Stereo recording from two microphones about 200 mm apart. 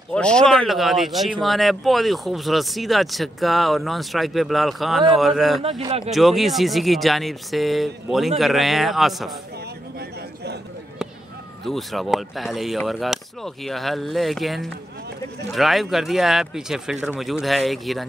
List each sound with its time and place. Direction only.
0.1 s speech: 5° left (ahead or behind)
5.6 s a man's voice: 25° right (ahead or behind)
6.0 s speech: centre (ahead or behind)
9.9 s a sound: 55° right (ahead or behind)
11.6 s speech: centre (ahead or behind)